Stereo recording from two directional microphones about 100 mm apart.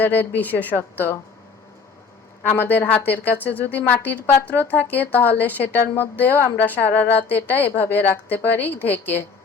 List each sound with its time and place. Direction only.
0.0 s a woman's voice: 20° left (ahead or behind)
2.5 s a woman's voice: 20° left (ahead or behind)